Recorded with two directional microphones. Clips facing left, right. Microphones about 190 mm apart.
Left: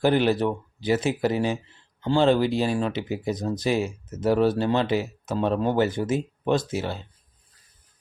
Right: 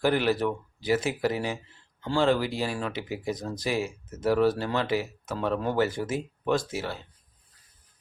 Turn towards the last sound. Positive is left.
turn(degrees=20)  # may be behind; listen again after turning